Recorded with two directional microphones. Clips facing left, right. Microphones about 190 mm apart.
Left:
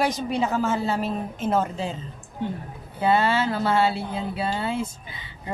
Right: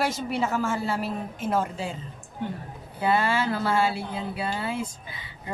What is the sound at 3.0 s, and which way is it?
Speech, 25° left (ahead or behind).